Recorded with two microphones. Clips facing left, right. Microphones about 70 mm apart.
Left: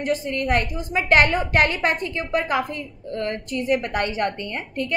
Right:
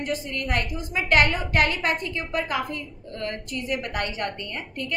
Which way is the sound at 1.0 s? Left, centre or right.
Left.